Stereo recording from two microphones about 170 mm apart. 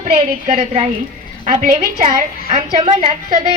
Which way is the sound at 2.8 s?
30° right (ahead or behind).